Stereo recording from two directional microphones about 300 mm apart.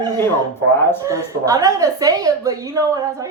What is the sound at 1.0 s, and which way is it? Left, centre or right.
A woman's voice, centre.